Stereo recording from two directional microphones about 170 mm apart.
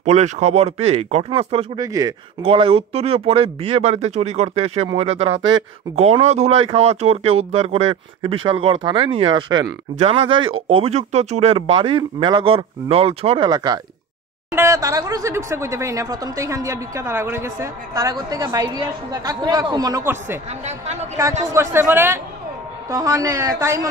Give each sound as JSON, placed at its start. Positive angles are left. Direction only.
{"t": 0.0, "sound": "speech", "side_deg": -40}
{"t": 1.8, "sound": "speech", "side_deg": -20}
{"t": 2.4, "sound": "speech", "side_deg": -35}
{"t": 14.5, "sound": "speech", "side_deg": -15}
{"t": 20.6, "sound": "speech", "side_deg": -40}
{"t": 21.5, "sound": "speech", "side_deg": -15}